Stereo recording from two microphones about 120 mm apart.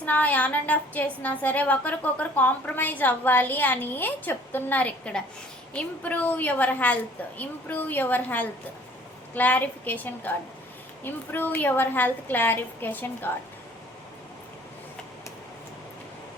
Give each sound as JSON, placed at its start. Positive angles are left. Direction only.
{"t": 0.0, "sound": "a woman's voice", "side_deg": 15}